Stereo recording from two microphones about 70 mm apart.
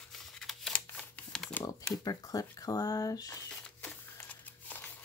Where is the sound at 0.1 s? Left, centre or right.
Centre.